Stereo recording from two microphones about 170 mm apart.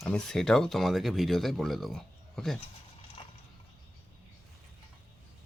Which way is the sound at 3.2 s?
30° left (ahead or behind).